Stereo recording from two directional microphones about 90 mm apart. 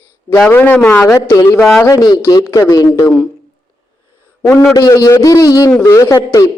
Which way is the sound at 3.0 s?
15° left (ahead or behind).